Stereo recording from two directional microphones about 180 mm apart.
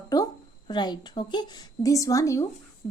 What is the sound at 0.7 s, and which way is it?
A woman's voice, 25° left (ahead or behind).